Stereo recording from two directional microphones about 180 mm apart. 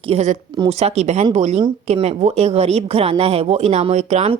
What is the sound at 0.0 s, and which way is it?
A woman's voice, 35° right (ahead or behind).